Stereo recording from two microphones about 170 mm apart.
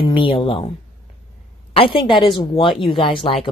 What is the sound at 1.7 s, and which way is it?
Speech, 30° left (ahead or behind).